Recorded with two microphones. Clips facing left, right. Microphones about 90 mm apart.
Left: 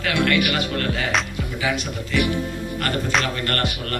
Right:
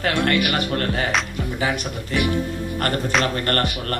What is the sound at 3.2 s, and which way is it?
Speech, 40° right (ahead or behind).